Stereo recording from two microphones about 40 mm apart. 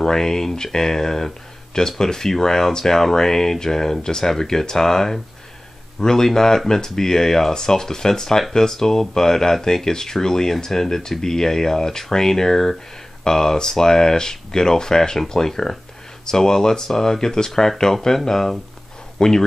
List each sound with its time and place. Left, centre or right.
0.0 s speech: centre